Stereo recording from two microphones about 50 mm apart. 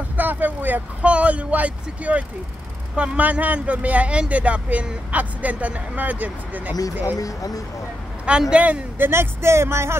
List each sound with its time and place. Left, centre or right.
0.2 s vehicle: right
1.0 s speech: right
8.3 s speech: centre
8.9 s speech: right